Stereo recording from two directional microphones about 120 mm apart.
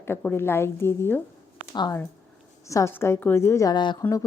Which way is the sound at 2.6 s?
25° left (ahead or behind).